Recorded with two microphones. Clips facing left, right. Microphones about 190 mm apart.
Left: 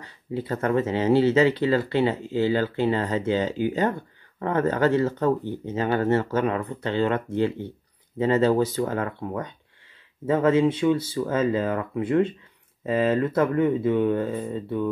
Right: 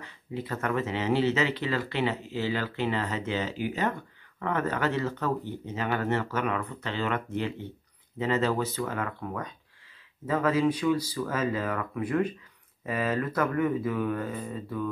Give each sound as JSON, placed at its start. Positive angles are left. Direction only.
{"t": 0.0, "sound": "speech", "side_deg": 30}